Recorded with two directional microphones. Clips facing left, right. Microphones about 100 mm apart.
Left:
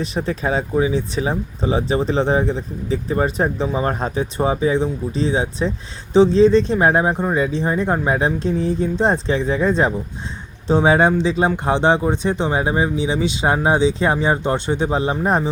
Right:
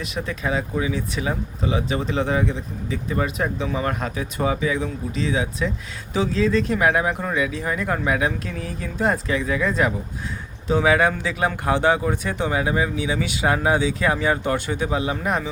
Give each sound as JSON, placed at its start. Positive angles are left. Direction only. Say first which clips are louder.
{"t": 0.0, "sound": "speech", "louder": "left 5 dB", "side_deg": 35}